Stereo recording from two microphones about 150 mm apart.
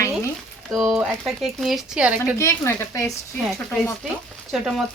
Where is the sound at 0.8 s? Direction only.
Centre (ahead or behind).